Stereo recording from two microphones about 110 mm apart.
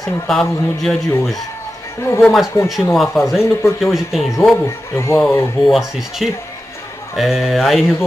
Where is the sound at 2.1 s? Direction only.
Centre (ahead or behind).